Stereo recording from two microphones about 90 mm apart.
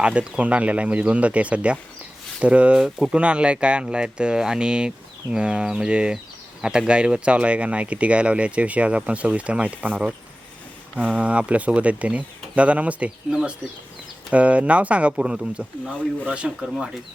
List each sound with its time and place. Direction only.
0.0 s speech: 10° right (ahead or behind)
14.3 s speech: 15° right (ahead or behind)